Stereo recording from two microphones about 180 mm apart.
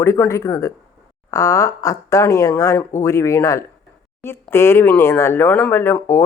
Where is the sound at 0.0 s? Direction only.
15° left (ahead or behind).